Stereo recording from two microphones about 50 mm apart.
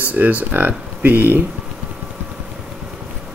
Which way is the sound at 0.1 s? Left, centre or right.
Right.